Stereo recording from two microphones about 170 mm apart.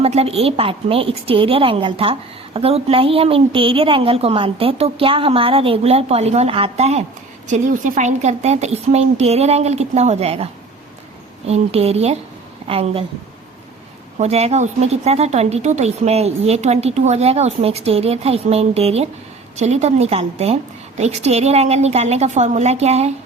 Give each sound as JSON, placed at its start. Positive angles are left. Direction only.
{"t": 0.0, "sound": "a woman's voice", "side_deg": -35}
{"t": 14.2, "sound": "a woman's voice", "side_deg": -40}